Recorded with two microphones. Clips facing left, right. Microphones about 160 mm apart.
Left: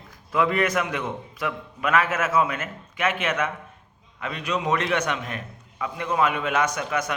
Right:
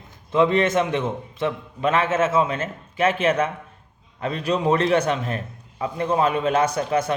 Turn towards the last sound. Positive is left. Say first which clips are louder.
# right 4 dB
turn(degrees=-30)  # may be behind; listen again after turning